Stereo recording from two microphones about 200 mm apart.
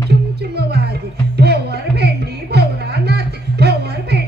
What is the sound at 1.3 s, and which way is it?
Music, 55° right (ahead or behind).